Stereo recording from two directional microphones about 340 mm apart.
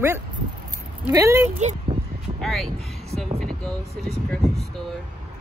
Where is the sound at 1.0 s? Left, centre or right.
Centre.